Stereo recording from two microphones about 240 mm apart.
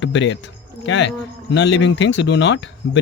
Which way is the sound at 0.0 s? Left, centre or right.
Left.